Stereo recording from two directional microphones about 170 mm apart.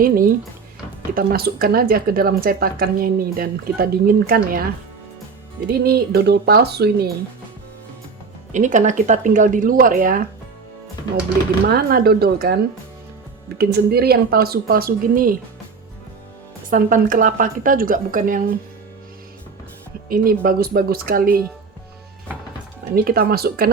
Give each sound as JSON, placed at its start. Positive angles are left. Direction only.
{"t": 0.0, "sound": "speech", "side_deg": -55}
{"t": 5.6, "sound": "speech", "side_deg": -65}
{"t": 8.5, "sound": "speech", "side_deg": -45}
{"t": 11.6, "sound": "speech", "side_deg": -60}
{"t": 13.6, "sound": "speech", "side_deg": -70}
{"t": 16.6, "sound": "speech", "side_deg": -50}
{"t": 20.1, "sound": "speech", "side_deg": -60}
{"t": 23.0, "sound": "speech", "side_deg": -60}